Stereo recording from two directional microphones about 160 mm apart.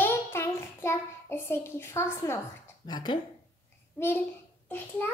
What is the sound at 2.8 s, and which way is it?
Speech, 30° left (ahead or behind).